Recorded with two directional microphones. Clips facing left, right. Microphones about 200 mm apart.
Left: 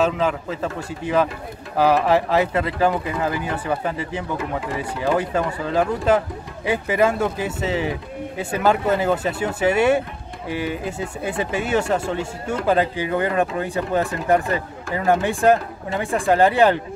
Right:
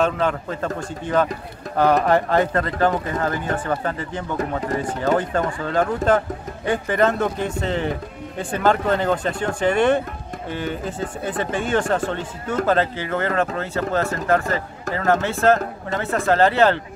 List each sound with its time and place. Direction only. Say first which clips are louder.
0.0 s a man's voice: even; 5° left (ahead or behind)